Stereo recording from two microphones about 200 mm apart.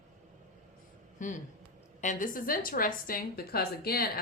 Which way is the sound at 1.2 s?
40° left (ahead or behind).